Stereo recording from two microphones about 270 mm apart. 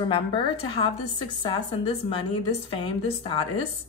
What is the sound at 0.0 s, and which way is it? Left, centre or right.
A woman's voice, centre.